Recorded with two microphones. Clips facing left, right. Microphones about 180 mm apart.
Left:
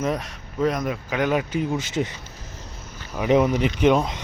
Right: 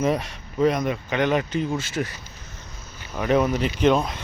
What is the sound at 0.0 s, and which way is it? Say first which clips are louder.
Speech: right 2 dB; centre (ahead or behind).